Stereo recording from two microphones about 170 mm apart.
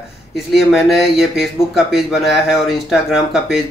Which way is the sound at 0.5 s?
Centre (ahead or behind).